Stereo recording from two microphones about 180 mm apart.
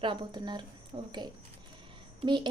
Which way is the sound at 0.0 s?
25° right (ahead or behind).